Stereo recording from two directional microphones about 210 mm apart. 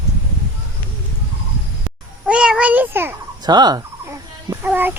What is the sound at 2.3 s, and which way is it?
A child's voice, 5° right (ahead or behind).